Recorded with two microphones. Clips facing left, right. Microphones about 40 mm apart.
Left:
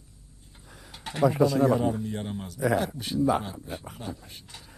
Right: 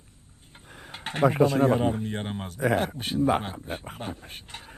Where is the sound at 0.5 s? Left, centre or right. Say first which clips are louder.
Right 5 dB; right.